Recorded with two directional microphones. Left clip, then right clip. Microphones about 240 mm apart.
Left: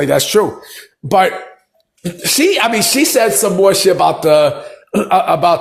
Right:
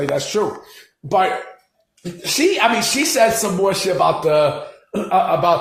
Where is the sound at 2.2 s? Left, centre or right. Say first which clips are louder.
Left 3 dB; left.